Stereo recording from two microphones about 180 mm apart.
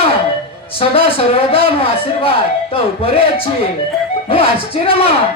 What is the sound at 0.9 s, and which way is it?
Speech, 30° left (ahead or behind).